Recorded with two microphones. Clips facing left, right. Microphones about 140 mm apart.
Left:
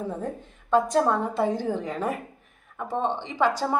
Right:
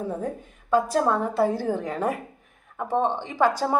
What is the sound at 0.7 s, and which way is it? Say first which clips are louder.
A woman's voice: even; 5° right (ahead or behind).